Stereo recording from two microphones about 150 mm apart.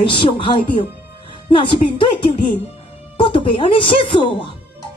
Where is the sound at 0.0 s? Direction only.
35° left (ahead or behind).